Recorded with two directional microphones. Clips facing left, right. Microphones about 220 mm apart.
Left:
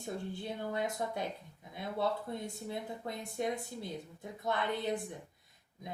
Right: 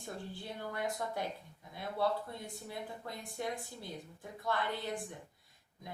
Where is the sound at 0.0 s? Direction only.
20° left (ahead or behind).